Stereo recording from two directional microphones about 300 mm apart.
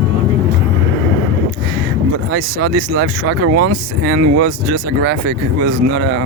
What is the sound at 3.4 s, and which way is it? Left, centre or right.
Speech, right.